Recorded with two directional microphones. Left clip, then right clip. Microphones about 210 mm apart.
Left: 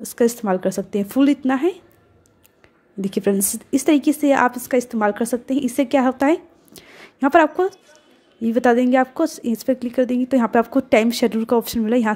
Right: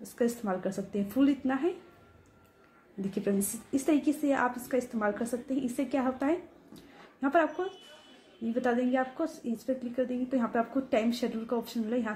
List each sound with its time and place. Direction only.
0.1 s a woman's voice: 40° left (ahead or behind)
3.0 s a woman's voice: 40° left (ahead or behind)